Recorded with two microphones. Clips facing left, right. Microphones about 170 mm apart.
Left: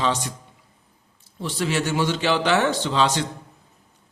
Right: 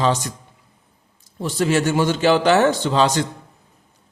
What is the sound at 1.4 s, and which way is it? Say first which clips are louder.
A man's voice: right 5 dB; 45° right (ahead or behind).